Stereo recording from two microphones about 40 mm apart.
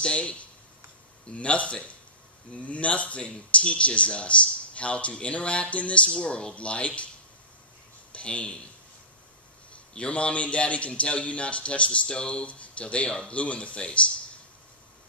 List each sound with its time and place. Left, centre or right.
0.0 s speech: left
8.1 s speech: left
9.9 s speech: left